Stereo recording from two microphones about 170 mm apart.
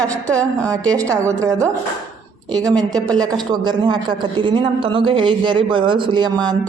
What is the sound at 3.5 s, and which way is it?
A man's voice, 25° right (ahead or behind).